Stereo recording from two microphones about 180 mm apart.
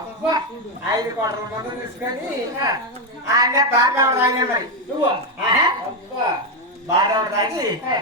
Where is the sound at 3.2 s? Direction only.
15° right (ahead or behind).